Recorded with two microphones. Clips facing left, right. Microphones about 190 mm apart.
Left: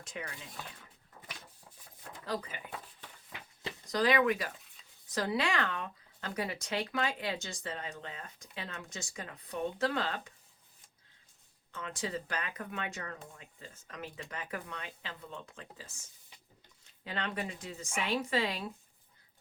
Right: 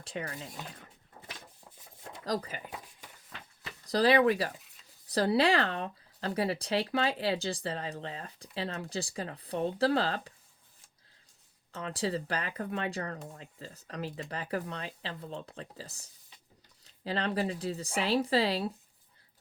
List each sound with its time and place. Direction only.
0.0 s speech: 35° right (ahead or behind)
2.2 s speech: 40° right (ahead or behind)
2.7 s a sound: 10° right (ahead or behind)
3.3 s a sound: 15° left (ahead or behind)
3.8 s speech: 35° right (ahead or behind)
11.7 s speech: 35° right (ahead or behind)